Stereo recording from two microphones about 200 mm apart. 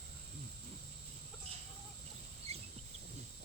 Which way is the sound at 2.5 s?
30° right (ahead or behind).